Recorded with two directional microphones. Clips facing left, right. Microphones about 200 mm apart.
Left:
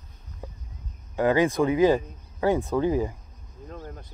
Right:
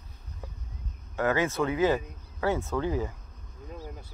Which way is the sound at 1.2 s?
15° left (ahead or behind).